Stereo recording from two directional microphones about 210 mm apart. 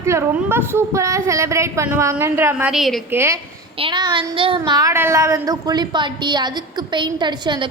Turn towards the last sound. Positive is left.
turn(degrees=-20)  # may be behind; listen again after turning